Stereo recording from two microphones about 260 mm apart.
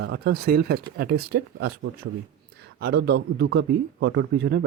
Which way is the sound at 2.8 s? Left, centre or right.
Right.